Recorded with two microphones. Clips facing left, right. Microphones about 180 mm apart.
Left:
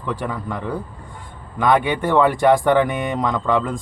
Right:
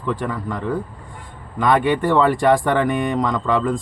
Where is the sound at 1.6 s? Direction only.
Centre (ahead or behind).